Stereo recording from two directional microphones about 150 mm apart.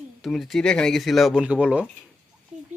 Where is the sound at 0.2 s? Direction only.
Centre (ahead or behind).